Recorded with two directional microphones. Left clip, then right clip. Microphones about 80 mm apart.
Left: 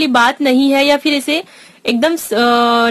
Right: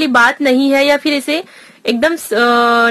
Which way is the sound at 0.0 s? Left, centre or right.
Left.